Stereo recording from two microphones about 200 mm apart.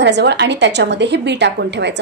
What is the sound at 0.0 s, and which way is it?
A woman's voice, 60° right (ahead or behind).